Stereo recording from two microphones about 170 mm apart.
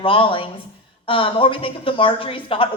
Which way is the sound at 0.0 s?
30° left (ahead or behind).